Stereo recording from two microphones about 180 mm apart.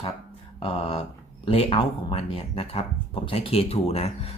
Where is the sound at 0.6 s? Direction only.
30° left (ahead or behind).